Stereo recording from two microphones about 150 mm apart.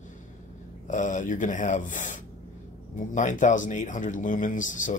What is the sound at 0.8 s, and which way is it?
Speech, 55° left (ahead or behind).